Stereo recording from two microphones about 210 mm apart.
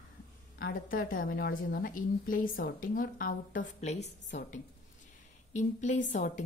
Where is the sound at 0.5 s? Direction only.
40° left (ahead or behind).